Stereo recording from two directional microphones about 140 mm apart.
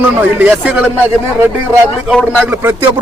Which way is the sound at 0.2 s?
15° right (ahead or behind).